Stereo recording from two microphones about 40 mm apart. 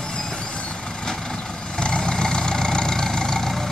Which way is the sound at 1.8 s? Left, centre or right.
Left.